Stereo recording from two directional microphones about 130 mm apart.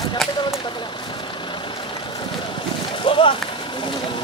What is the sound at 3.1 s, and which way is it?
Speech, 40° left (ahead or behind).